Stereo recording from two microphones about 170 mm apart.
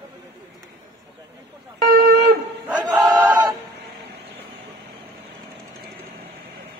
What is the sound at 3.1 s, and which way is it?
Choir, 10° right (ahead or behind).